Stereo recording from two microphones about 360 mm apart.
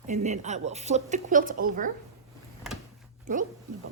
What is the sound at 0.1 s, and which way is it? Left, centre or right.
Speech, centre.